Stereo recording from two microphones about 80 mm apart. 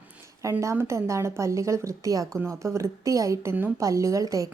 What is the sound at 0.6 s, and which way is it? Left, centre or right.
A woman's voice, right.